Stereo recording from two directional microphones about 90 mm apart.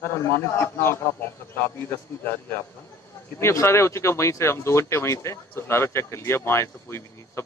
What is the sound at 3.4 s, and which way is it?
Speech, 30° left (ahead or behind).